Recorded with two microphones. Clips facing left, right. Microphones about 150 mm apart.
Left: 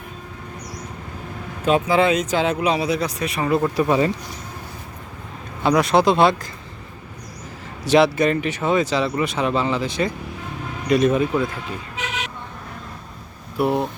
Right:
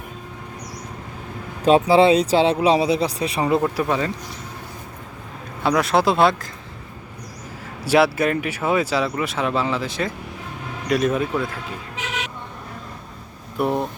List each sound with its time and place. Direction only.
1.6 s speech: 35° right (ahead or behind)
3.8 s speech: 15° left (ahead or behind)
5.6 s speech: centre (ahead or behind)
7.9 s speech: 5° right (ahead or behind)
13.6 s speech: 5° left (ahead or behind)